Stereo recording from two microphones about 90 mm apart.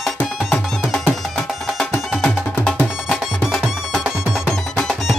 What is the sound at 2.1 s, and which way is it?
Music, 5° left (ahead or behind).